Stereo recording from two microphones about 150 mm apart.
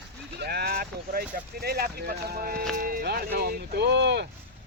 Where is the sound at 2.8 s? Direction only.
75° right (ahead or behind); by 4.2 s 90° right.